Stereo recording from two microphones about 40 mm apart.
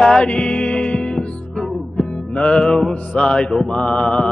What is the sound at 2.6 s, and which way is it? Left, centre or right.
Music, centre.